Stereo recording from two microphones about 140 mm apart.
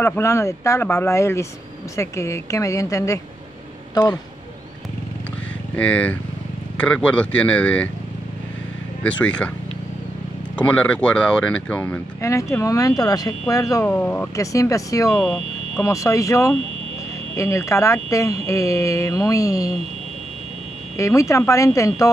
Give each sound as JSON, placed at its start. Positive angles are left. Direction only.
{"t": 0.0, "sound": "speech", "side_deg": 20}
{"t": 5.8, "sound": "speech", "side_deg": 10}
{"t": 9.0, "sound": "speech", "side_deg": 10}
{"t": 10.5, "sound": "speech", "side_deg": 10}
{"t": 12.2, "sound": "speech", "side_deg": 20}
{"t": 13.8, "sound": "speech", "side_deg": 10}
{"t": 14.3, "sound": "speech", "side_deg": 25}
{"t": 15.1, "sound": "speech", "side_deg": 5}
{"t": 15.8, "sound": "speech", "side_deg": 20}
{"t": 20.9, "sound": "speech", "side_deg": 20}